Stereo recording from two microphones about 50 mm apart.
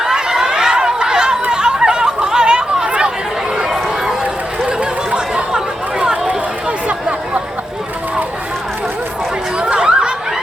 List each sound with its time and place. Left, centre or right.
0.0 s chatter: centre
3.6 s run: centre
4.6 s chatter: centre
9.6 s a sound: centre